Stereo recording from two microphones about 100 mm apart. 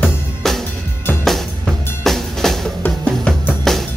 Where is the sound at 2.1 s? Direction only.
5° left (ahead or behind).